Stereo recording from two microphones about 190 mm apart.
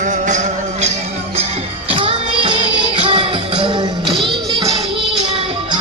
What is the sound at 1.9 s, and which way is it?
Music, 30° right (ahead or behind).